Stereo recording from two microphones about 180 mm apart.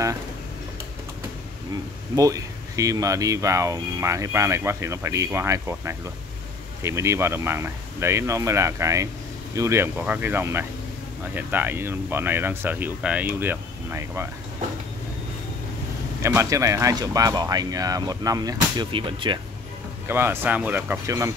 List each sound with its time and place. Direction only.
2.1 s speech: 20° right (ahead or behind)
16.2 s speech: 15° right (ahead or behind)
20.1 s speech: 10° right (ahead or behind)